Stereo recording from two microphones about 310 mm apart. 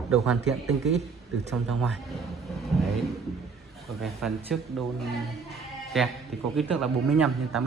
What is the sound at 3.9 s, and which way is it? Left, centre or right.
Speech, centre.